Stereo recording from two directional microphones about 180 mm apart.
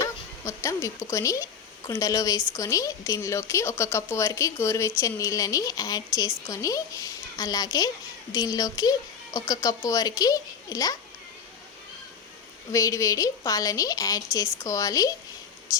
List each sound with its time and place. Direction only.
0.4 s speech: 15° left (ahead or behind)
12.7 s speech: 15° left (ahead or behind)